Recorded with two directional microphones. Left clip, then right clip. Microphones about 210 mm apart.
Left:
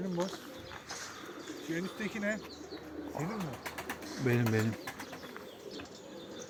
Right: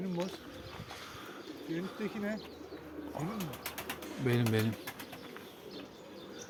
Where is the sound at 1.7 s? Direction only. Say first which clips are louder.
Left 1 dB; 55° left (ahead or behind).